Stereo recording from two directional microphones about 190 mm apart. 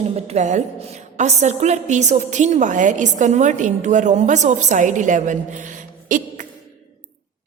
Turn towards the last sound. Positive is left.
turn(degrees=-45)  # may be behind; listen again after turning